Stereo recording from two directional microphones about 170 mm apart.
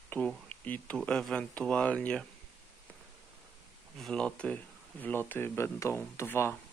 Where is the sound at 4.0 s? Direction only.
5° left (ahead or behind).